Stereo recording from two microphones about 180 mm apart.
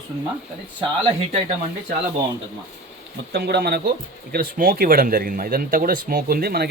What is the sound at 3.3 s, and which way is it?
Speech, 65° right (ahead or behind).